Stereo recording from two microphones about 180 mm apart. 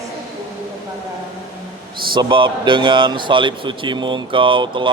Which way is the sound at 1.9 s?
25° right (ahead or behind).